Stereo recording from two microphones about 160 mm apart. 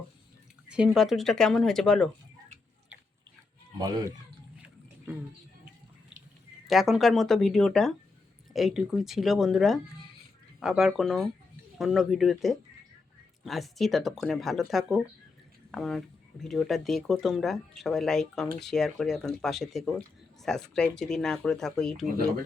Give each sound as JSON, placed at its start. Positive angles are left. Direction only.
{"t": 0.7, "sound": "speech", "side_deg": -5}
{"t": 3.8, "sound": "speech", "side_deg": -25}
{"t": 6.7, "sound": "speech", "side_deg": 0}